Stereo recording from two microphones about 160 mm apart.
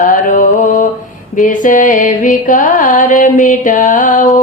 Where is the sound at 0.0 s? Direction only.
55° left (ahead or behind).